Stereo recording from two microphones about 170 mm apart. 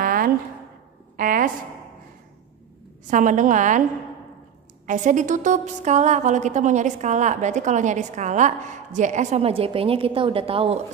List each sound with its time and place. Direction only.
0.0 s a sound: 55° right (ahead or behind)
3.1 s a woman's voice: 50° right (ahead or behind)
4.8 s a woman's voice: 45° right (ahead or behind)